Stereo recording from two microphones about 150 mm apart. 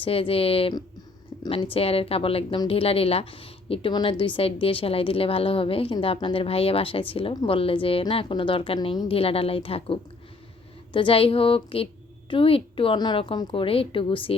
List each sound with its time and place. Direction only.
0.0 s speech: 40° left (ahead or behind)